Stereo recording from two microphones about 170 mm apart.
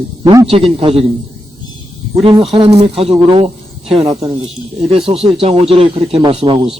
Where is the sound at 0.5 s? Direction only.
35° right (ahead or behind).